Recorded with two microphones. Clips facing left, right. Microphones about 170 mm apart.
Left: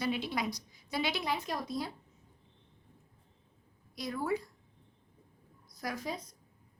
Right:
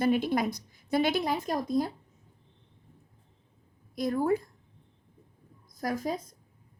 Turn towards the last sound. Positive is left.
turn(degrees=-45)  # may be behind; listen again after turning